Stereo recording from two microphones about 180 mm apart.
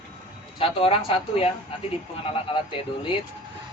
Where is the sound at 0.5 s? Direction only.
30° left (ahead or behind).